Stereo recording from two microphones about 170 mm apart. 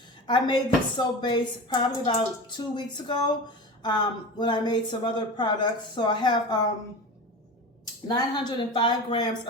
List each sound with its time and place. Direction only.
0.3 s speech: 25° left (ahead or behind)
8.0 s speech: 25° left (ahead or behind)